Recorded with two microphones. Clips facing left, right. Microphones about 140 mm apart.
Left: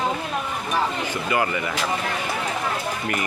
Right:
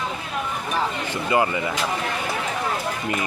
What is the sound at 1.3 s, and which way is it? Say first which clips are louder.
Speech: right 3 dB; 25° right (ahead or behind).